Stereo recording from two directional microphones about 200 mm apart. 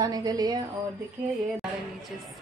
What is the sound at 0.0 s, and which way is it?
Speech, 20° right (ahead or behind).